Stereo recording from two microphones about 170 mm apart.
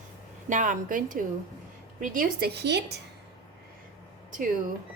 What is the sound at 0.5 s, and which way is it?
A woman's voice, 50° right (ahead or behind).